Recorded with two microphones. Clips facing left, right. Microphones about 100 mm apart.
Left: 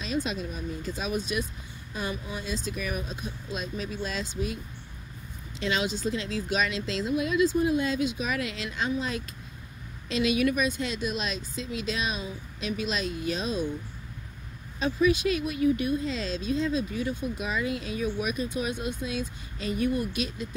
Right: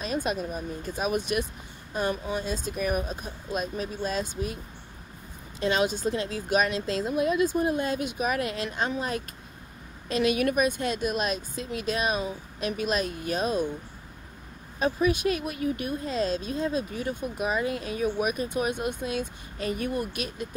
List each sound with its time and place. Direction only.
0.0 s speech: 50° right (ahead or behind)
2.3 s speech: 40° right (ahead or behind)
5.6 s speech: 45° right (ahead or behind)
14.8 s speech: 45° right (ahead or behind)